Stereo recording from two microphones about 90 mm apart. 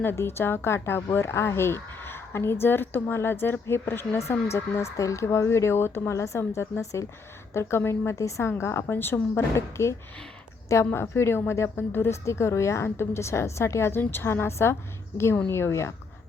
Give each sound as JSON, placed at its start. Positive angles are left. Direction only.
{"t": 0.0, "sound": "speech", "side_deg": 25}
{"t": 10.9, "sound": "speech", "side_deg": 30}